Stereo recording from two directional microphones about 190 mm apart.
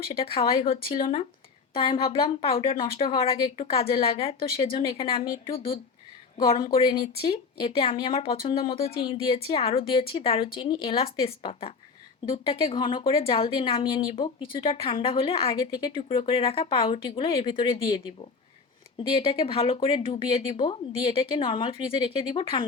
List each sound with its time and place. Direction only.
0.1 s a woman's voice: 30° left (ahead or behind)